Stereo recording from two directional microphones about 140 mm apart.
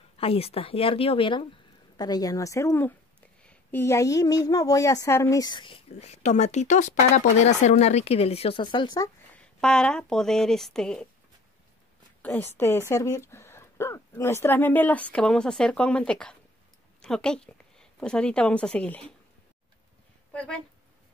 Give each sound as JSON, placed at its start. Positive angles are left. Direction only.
{"t": 0.2, "sound": "speech", "side_deg": 45}
{"t": 2.0, "sound": "speech", "side_deg": 30}
{"t": 9.3, "sound": "speech", "side_deg": 5}
{"t": 12.2, "sound": "a woman's voice", "side_deg": 15}
{"t": 20.3, "sound": "speech", "side_deg": 5}